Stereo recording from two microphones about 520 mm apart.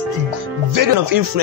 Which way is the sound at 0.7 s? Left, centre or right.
Right.